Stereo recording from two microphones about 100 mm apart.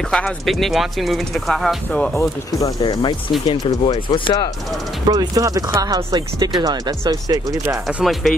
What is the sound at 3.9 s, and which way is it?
Speech, 45° left (ahead or behind).